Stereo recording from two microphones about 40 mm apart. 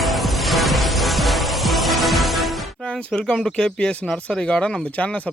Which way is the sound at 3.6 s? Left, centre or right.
Centre.